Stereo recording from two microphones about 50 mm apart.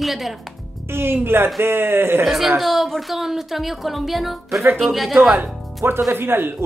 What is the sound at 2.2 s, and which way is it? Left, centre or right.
Speech, centre.